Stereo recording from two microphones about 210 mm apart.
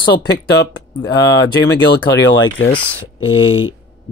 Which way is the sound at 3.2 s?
70° left (ahead or behind).